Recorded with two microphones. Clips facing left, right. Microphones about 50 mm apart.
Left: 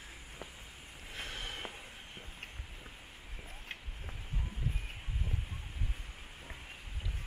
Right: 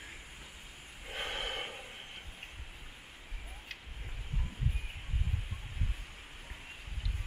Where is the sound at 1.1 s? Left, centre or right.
Right.